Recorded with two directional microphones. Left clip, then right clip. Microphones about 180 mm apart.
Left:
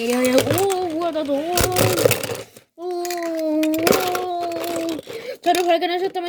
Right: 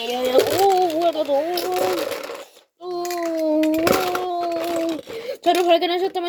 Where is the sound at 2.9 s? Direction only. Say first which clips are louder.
Even; 65° left (ahead or behind).